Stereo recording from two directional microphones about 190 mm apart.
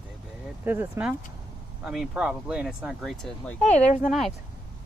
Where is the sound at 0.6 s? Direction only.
10° right (ahead or behind); by 3.6 s 5° left (ahead or behind).